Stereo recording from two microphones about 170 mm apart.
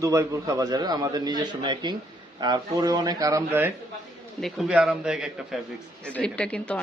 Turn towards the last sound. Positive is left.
turn(degrees=5)  # may be behind; listen again after turning